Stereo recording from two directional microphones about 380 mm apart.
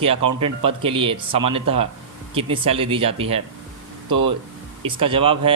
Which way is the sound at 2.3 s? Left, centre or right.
Centre.